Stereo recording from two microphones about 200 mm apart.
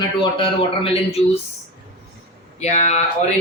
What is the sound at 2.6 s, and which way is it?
Speech, 35° left (ahead or behind).